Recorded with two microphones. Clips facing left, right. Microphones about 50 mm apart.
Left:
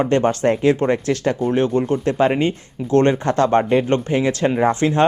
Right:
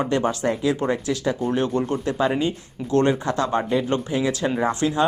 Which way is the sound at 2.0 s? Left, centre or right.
Left.